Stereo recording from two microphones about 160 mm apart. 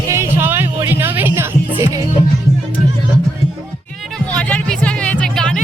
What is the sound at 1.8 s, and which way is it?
Music, 20° right (ahead or behind).